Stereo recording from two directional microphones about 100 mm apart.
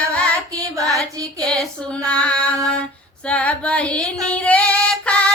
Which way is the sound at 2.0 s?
10° left (ahead or behind).